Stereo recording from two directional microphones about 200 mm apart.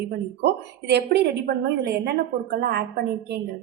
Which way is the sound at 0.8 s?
55° right (ahead or behind).